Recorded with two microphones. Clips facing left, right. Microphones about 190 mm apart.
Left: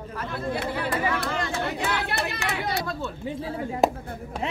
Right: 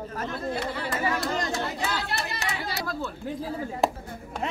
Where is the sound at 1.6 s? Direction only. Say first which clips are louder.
Left 2 dB; 65° left (ahead or behind).